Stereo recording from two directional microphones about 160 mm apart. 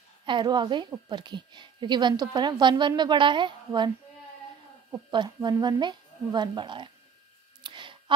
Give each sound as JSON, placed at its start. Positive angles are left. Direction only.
{"t": 0.2, "sound": "a woman's voice", "side_deg": -30}
{"t": 4.9, "sound": "a woman's voice", "side_deg": -30}
{"t": 7.6, "sound": "clicking", "side_deg": -30}